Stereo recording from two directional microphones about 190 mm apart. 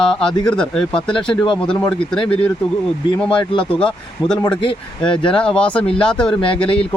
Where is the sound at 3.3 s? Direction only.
30° left (ahead or behind).